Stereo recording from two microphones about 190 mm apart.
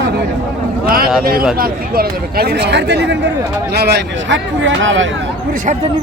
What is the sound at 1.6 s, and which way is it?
Speech, 50° right (ahead or behind).